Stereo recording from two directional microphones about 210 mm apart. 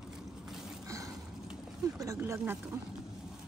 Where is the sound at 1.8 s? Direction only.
15° right (ahead or behind).